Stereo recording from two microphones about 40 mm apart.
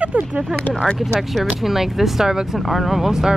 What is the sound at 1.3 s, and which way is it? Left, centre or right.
Speech, centre.